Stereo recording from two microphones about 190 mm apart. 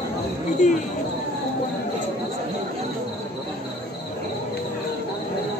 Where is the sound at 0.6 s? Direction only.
40° left (ahead or behind).